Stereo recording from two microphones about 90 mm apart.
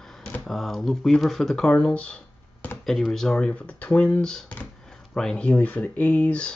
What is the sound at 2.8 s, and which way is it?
Speech, 5° left (ahead or behind).